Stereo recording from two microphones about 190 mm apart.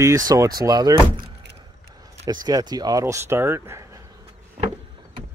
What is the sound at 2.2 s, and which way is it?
Speech, 20° right (ahead or behind).